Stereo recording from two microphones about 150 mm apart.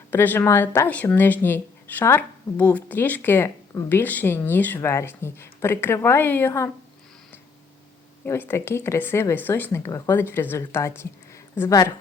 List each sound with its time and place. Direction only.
0.1 s speech: 15° left (ahead or behind)
8.2 s speech: 15° left (ahead or behind)